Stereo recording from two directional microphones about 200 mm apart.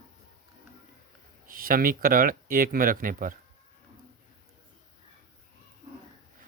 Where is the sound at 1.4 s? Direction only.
45° right (ahead or behind).